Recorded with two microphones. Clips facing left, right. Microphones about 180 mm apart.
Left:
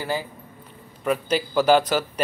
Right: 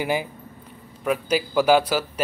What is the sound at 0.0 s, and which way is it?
A man's voice, 15° right (ahead or behind).